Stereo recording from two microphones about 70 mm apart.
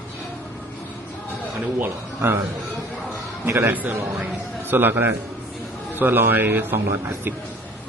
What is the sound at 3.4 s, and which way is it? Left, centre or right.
Speech, right.